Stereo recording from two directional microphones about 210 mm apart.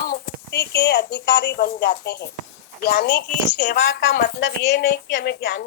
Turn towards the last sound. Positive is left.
turn(degrees=50)  # may be behind; listen again after turning